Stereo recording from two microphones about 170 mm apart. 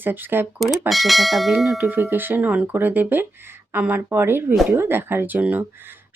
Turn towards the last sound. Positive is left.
turn(degrees=-10)  # may be behind; listen again after turning